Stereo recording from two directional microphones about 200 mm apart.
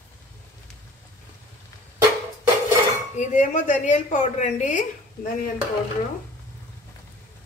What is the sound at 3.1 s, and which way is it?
A woman's voice, 40° left (ahead or behind).